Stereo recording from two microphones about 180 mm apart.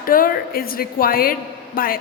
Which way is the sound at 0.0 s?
50° left (ahead or behind).